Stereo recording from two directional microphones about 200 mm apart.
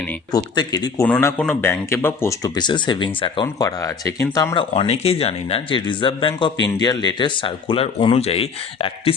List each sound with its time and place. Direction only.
0.3 s speech: 20° left (ahead or behind)
1.0 s speech: 5° left (ahead or behind)
4.7 s speech: 30° left (ahead or behind)